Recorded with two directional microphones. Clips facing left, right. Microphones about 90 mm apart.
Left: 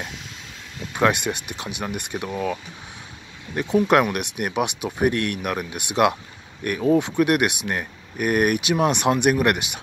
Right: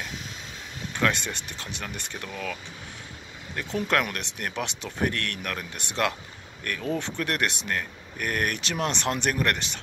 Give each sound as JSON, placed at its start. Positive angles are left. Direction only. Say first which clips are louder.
{"t": 0.9, "sound": "speech", "louder": "left 6 dB", "side_deg": 15}
{"t": 3.7, "sound": "speech", "louder": "left 8 dB", "side_deg": 15}